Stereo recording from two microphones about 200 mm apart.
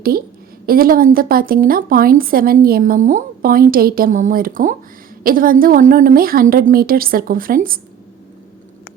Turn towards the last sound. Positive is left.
turn(degrees=-45)  # may be behind; listen again after turning